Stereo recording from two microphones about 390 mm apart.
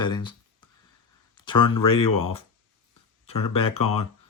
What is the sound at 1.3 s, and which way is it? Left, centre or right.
Speech, centre.